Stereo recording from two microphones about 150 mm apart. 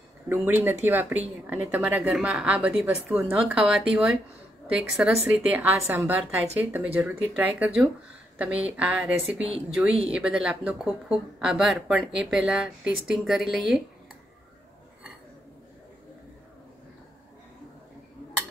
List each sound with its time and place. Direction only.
0.3 s speech: 15° right (ahead or behind)